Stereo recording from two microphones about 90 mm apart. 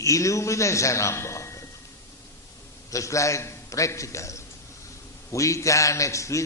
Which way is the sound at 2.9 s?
35° left (ahead or behind).